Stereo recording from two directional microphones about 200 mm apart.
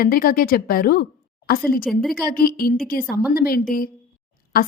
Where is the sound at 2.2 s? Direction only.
50° left (ahead or behind).